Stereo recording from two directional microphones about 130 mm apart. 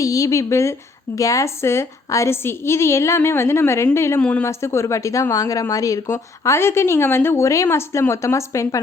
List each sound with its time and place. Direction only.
0.0 s speech: 25° left (ahead or behind)